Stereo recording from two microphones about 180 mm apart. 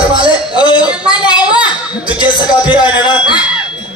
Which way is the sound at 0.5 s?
25° left (ahead or behind).